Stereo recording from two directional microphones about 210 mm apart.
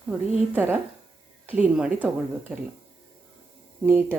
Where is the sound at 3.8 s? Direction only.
10° right (ahead or behind).